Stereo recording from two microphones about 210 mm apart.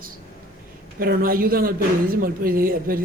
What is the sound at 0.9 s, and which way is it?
Speech, 45° right (ahead or behind).